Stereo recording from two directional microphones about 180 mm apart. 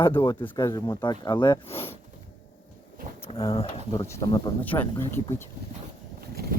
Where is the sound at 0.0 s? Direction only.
30° left (ahead or behind).